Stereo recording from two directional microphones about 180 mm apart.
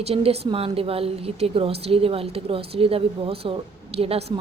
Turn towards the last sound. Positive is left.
turn(degrees=-35)  # may be behind; listen again after turning